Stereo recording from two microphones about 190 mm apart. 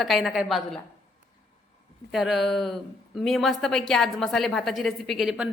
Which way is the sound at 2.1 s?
Centre (ahead or behind).